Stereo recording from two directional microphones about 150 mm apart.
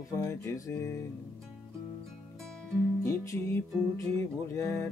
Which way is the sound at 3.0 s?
20° left (ahead or behind).